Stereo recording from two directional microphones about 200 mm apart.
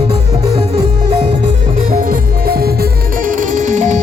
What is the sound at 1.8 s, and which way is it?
Music, 40° right (ahead or behind).